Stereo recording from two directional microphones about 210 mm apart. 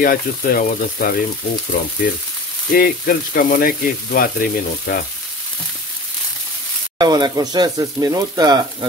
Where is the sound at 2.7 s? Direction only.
45° left (ahead or behind).